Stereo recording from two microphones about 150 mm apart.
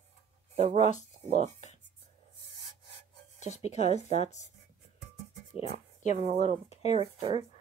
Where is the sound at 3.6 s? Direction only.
50° left (ahead or behind).